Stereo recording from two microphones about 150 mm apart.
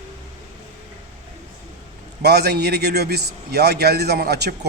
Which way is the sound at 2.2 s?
90° right.